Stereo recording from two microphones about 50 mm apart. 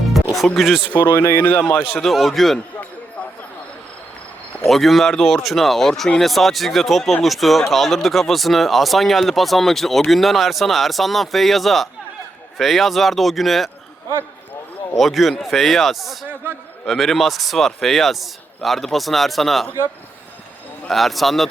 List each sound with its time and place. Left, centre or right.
0.3 s a man's voice: centre
0.9 s speech: left
2.0 s a man's voice: centre
4.6 s a man's voice: centre
14.9 s a man's voice: centre
20.8 s a man's voice: centre